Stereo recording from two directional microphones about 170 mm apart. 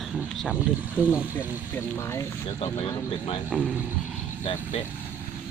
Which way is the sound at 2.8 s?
35° left (ahead or behind).